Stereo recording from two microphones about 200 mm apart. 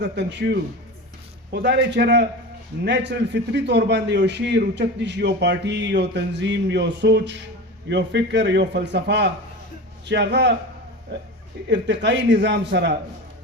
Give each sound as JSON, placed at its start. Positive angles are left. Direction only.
{"t": 0.0, "sound": "a man's voice", "side_deg": -60}
{"t": 11.7, "sound": "a man's voice", "side_deg": -60}